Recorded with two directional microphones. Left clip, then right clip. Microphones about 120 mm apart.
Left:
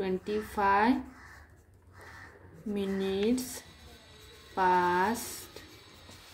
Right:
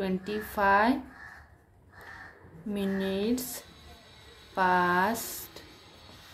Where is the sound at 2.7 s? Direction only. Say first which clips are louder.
Right 1 dB; 30° right (ahead or behind).